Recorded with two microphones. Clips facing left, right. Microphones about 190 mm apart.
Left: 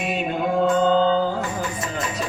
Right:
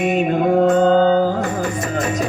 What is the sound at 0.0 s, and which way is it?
Mantra, 45° right (ahead or behind).